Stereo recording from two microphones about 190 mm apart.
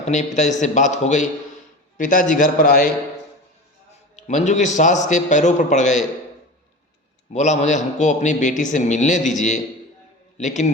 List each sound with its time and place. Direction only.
0.0 s a man's voice: 40° left (ahead or behind)
4.1 s a man's voice: 40° left (ahead or behind)
7.3 s a man's voice: 40° left (ahead or behind)
10.3 s a man's voice: 40° left (ahead or behind)